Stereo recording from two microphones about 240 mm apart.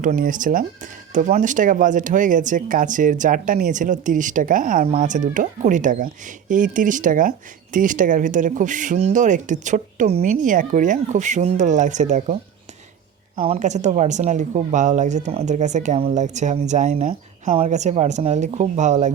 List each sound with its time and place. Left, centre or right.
0.0 s a woman's voice: right